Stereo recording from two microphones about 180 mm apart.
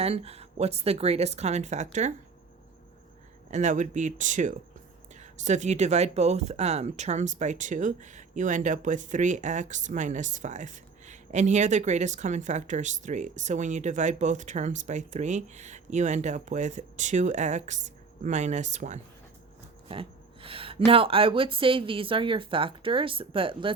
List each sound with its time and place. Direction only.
0.0 s speech: 35° right (ahead or behind)
3.5 s speech: 40° right (ahead or behind)
19.9 s speech: 30° right (ahead or behind)